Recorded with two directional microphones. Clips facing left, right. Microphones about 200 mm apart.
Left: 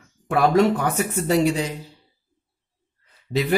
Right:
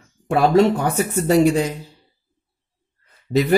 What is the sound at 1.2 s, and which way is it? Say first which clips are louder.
Speech: right 5 dB; 45° right (ahead or behind).